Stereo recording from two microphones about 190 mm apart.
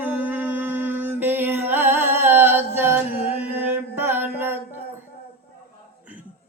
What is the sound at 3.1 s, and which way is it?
Mantra, 30° left (ahead or behind).